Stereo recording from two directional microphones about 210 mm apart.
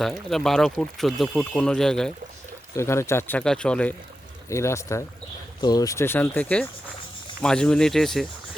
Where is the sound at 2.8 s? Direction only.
15° left (ahead or behind).